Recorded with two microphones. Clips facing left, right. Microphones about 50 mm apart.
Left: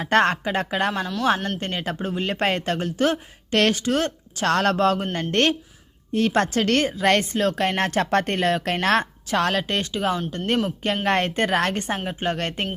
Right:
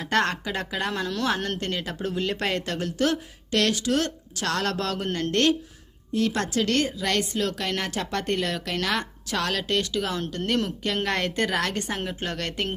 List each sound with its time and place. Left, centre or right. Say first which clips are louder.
0.0 s a woman's voice: left 5 dB; left
1.0 s speech: left 3 dB; centre
1.5 s a woman's voice: left 2 dB; left